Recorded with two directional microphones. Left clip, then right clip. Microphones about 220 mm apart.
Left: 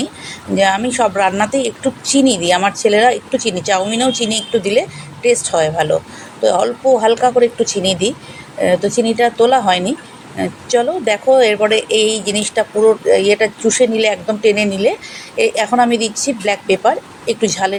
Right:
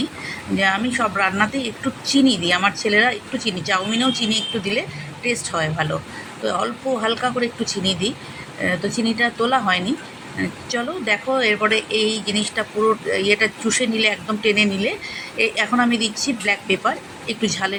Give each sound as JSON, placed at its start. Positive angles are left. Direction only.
{"t": 0.5, "sound": "speech", "side_deg": 20}